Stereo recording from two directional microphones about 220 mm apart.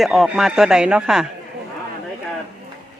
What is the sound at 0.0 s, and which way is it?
Speech, centre (ahead or behind).